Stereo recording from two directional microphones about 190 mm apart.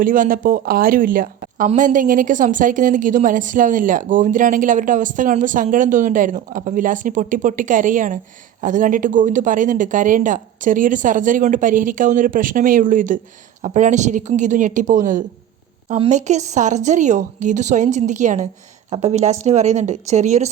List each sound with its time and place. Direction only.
0.0 s a woman's voice: 45° right (ahead or behind)